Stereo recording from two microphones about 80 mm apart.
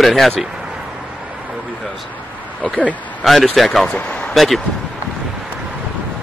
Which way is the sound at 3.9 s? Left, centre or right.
Centre.